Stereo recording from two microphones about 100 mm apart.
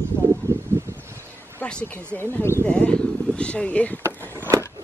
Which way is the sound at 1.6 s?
15° left (ahead or behind).